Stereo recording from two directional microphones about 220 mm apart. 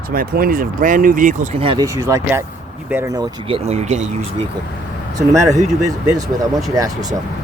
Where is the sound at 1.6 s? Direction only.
20° right (ahead or behind).